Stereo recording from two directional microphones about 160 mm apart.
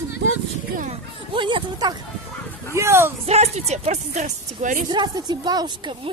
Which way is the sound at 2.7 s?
15° right (ahead or behind).